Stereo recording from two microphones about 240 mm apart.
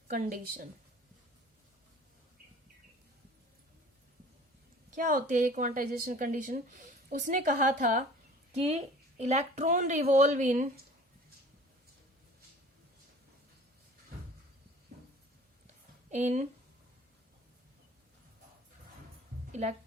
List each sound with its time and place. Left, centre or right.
0.1 s a woman's voice: right
4.9 s a woman's voice: right
14.9 s a sound: right
16.0 s speech: right